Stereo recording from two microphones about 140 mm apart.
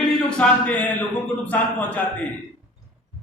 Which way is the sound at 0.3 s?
10° left (ahead or behind).